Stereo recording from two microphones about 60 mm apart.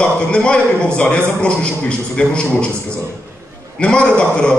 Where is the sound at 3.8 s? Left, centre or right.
Centre.